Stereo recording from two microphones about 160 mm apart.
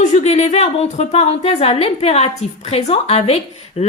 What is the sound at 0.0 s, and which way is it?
A woman's voice, 45° left (ahead or behind).